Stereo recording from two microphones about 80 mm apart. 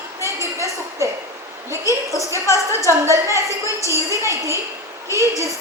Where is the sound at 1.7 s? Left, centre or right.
Right.